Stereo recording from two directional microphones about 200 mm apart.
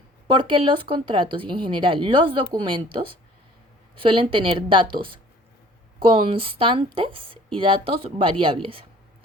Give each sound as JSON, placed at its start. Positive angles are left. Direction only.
{"t": 0.3, "sound": "speech", "side_deg": -25}